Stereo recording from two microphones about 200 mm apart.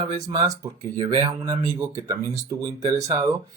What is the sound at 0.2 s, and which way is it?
Speech, 15° right (ahead or behind).